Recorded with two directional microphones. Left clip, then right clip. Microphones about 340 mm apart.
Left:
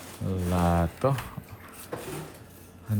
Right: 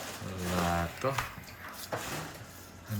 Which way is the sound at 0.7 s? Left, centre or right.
Centre.